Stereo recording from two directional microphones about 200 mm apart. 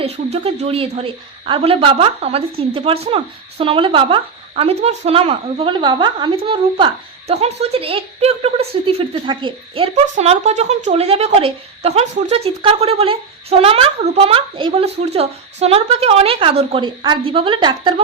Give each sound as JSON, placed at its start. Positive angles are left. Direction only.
{"t": 0.0, "sound": "a woman's voice", "side_deg": -30}